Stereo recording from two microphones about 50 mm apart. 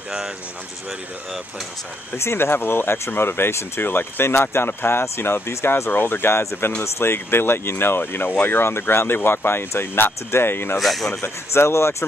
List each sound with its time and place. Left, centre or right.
2.1 s speech: left
5.9 s speech: left
10.8 s speech: centre
11.2 s speech: left